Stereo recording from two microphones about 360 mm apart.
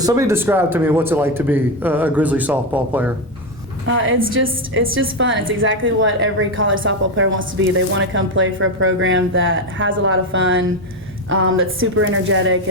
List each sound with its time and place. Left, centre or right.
0.0 s a man's voice: centre
3.8 s a woman's voice: right